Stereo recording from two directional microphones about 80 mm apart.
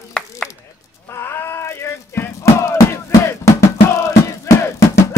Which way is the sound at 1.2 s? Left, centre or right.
Left.